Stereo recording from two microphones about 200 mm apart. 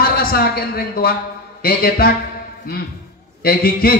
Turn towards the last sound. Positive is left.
turn(degrees=50)  # may be behind; listen again after turning